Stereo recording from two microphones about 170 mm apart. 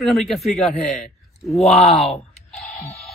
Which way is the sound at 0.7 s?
45° left (ahead or behind).